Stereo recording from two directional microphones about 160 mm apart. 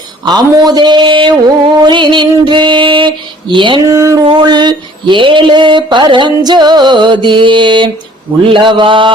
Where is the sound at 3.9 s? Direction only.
20° right (ahead or behind).